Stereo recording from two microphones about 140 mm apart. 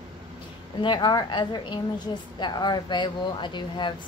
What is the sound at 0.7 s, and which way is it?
Speech, 30° left (ahead or behind).